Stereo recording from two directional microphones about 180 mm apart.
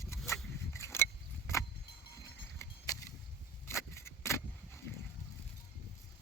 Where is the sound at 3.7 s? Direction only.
15° left (ahead or behind).